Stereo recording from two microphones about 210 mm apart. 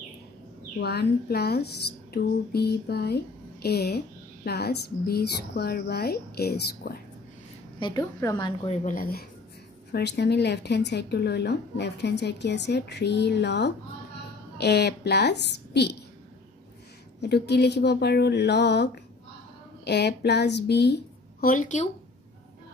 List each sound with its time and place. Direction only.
0.7 s speech: 50° left (ahead or behind)
7.8 s a woman's voice: 15° left (ahead or behind)
8.8 s speech: 45° left (ahead or behind)
17.2 s a woman's voice: 50° left (ahead or behind)